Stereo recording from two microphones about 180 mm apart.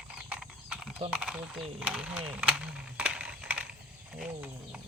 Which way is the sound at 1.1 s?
5° right (ahead or behind).